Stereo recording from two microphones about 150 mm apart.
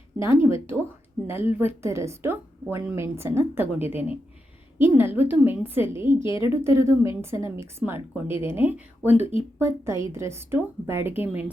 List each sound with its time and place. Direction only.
0.3 s speech: 15° right (ahead or behind)
6.1 s a woman's voice: 35° left (ahead or behind)
6.4 s speech: 20° right (ahead or behind)